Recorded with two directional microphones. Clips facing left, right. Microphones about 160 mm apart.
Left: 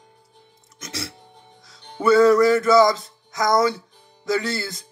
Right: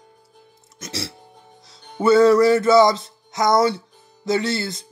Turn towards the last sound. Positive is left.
turn(degrees=-25)  # may be behind; listen again after turning